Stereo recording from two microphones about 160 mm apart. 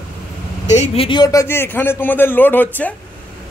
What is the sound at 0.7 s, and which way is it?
Speech, 40° left (ahead or behind).